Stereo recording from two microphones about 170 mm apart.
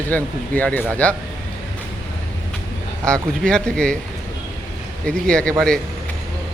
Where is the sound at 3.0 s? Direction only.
5° left (ahead or behind).